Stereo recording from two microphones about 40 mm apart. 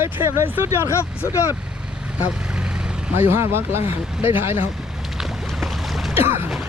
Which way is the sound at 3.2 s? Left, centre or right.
Right.